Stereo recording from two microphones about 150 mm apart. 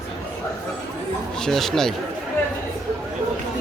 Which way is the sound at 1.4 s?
Centre (ahead or behind).